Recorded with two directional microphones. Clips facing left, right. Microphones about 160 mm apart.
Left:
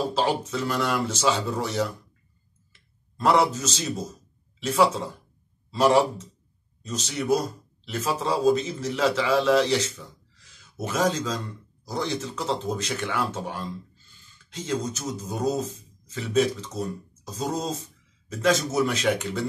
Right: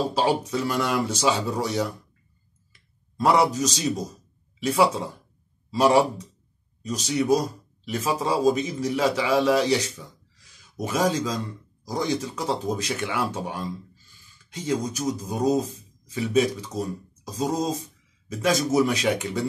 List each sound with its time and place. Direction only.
0.1 s speech: 15° right (ahead or behind)
2.7 s clicking: 15° right (ahead or behind)
3.5 s speech: 15° right (ahead or behind)